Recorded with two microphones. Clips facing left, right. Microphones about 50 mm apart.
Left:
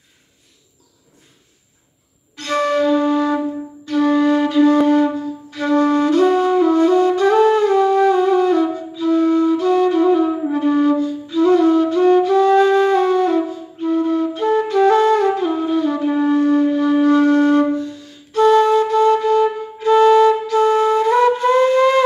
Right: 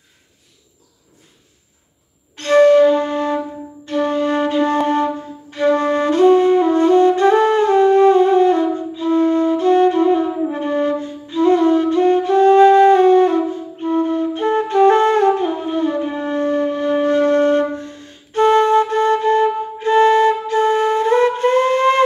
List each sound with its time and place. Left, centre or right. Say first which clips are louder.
2.3 s flute: right 8 dB; right